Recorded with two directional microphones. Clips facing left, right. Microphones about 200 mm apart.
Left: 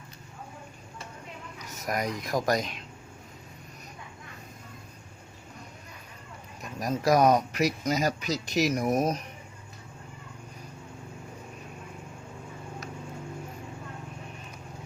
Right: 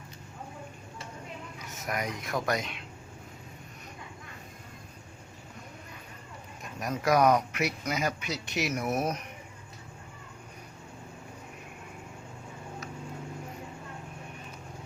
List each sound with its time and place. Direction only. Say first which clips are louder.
1.5 s speech: left 3 dB; 40° left (ahead or behind)
6.7 s speech: left 2 dB; 35° left (ahead or behind)